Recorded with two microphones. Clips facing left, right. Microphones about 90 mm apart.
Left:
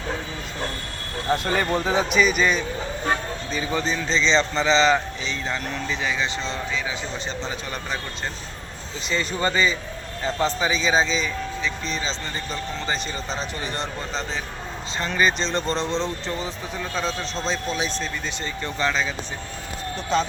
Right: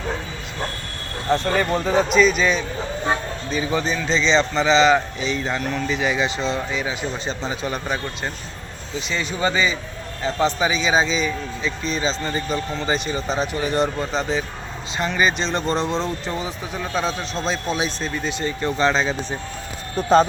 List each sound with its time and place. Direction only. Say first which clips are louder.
1.3 s speech: right 3 dB; 5° left (ahead or behind)
3.8 s speech: even; 5° right (ahead or behind)
9.0 s speech: right 1 dB; 5° right (ahead or behind); by 19.1 s 25° right (ahead or behind)
20.0 s speech: right 8 dB; 40° right (ahead or behind)